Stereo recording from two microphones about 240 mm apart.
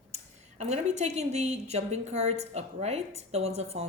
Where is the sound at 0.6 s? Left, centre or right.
Right.